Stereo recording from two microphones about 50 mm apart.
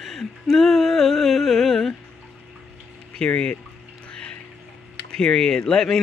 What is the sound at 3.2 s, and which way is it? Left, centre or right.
Speech, centre.